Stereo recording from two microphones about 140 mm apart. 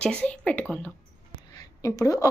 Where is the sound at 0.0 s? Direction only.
10° left (ahead or behind).